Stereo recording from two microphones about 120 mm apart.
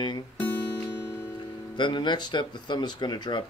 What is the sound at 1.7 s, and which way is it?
Speech, 40° left (ahead or behind).